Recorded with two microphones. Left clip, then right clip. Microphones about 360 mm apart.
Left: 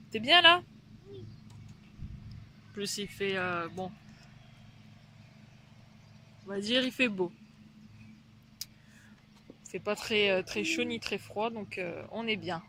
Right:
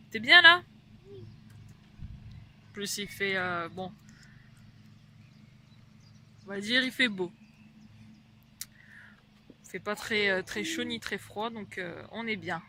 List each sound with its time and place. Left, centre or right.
0.1 s speech: centre
2.7 s speech: centre
6.5 s speech: centre
8.6 s a sound: centre
9.7 s speech: centre